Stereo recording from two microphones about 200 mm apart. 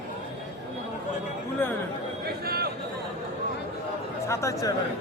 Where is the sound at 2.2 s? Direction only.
50° right (ahead or behind).